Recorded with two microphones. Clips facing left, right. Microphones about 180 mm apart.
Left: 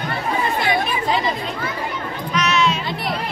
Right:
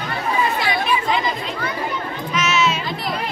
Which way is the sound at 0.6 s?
50° left (ahead or behind).